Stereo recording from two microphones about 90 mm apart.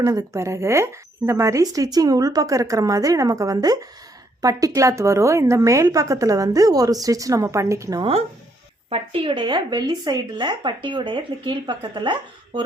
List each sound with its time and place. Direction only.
0.0 s speech: 40° right (ahead or behind)
8.9 s speech: 80° right; by 12.1 s 55° right (ahead or behind)